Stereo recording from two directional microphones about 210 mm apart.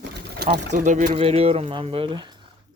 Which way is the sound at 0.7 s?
35° right (ahead or behind).